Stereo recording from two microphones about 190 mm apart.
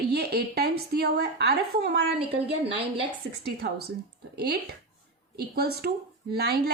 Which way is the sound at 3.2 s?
90° right.